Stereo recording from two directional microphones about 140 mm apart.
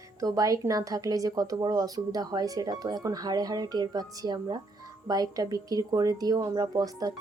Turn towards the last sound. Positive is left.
turn(degrees=-25)  # may be behind; listen again after turning